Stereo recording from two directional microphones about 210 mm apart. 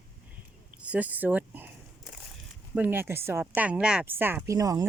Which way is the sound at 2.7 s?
10° right (ahead or behind).